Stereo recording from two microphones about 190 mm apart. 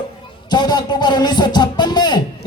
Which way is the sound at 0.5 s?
20° left (ahead or behind).